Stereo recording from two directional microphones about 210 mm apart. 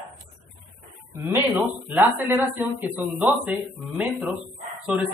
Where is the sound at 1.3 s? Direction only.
10° right (ahead or behind).